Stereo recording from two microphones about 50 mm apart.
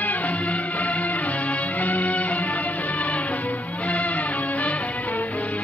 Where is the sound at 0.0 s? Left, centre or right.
Left.